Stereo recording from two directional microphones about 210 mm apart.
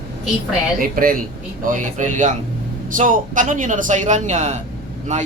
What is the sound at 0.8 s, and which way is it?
Speech, 40° right (ahead or behind).